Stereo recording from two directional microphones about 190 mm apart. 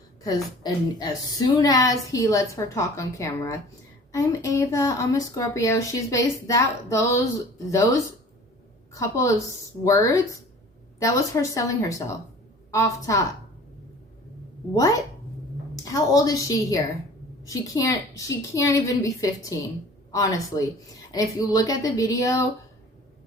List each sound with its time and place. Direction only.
0.6 s a woman's voice: 20° left (ahead or behind)
15.7 s a woman's voice: 20° left (ahead or behind)